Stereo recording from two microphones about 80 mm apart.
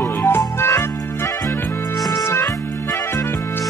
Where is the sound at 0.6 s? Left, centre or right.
Left.